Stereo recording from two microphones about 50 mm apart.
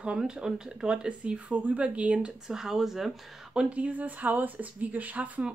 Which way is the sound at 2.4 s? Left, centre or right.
Centre.